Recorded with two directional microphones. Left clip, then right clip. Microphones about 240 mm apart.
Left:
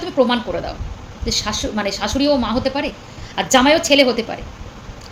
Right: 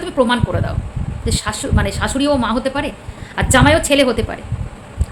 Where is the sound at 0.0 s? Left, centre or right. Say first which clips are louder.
Right 1 dB; centre.